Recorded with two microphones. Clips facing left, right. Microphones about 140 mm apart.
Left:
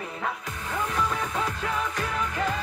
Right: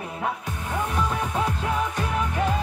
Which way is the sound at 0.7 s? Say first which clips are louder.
Right 2 dB; 15° right (ahead or behind).